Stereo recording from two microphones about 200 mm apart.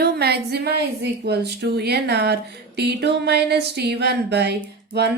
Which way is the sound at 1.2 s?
55° right (ahead or behind).